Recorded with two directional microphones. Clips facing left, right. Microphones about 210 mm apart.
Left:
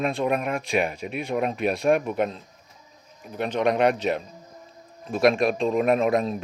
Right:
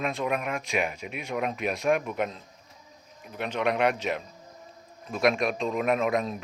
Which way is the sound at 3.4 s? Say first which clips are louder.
Left 4 dB; 35° left (ahead or behind).